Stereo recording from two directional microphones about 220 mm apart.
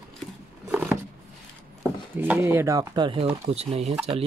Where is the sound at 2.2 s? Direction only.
10° right (ahead or behind).